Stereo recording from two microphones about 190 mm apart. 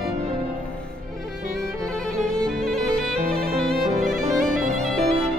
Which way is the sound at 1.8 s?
Centre (ahead or behind).